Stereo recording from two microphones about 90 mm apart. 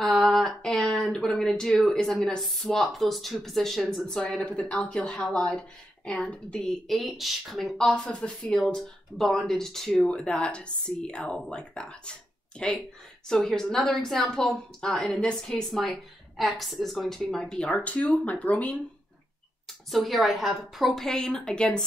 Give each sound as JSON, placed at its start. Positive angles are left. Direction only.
{"t": 0.0, "sound": "a sound", "side_deg": 0}
{"t": 2.4, "sound": "a woman's voice", "side_deg": 5}
{"t": 19.9, "sound": "a woman's voice", "side_deg": 0}